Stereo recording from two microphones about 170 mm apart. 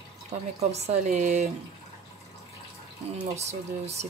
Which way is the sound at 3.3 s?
40° right (ahead or behind).